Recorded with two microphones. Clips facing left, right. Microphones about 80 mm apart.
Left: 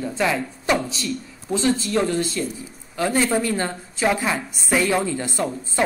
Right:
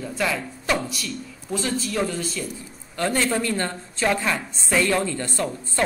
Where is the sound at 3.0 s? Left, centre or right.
Centre.